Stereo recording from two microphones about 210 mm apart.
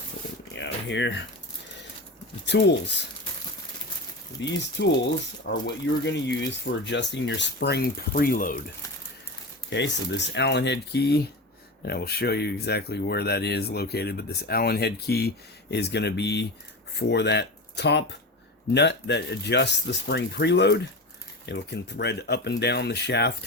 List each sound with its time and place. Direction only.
0.5 s a sound: 60° left (ahead or behind)
2.5 s speech: 55° left (ahead or behind)
4.4 s speech: 55° left (ahead or behind)
9.6 s speech: 55° left (ahead or behind)